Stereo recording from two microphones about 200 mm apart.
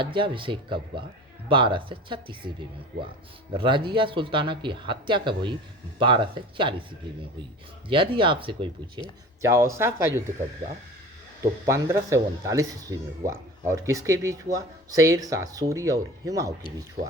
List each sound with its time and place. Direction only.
0.0 s speech: 25° right (ahead or behind)
7.9 s speech: 25° right (ahead or behind)
9.4 s speech: 15° right (ahead or behind)
11.6 s speech: 15° right (ahead or behind)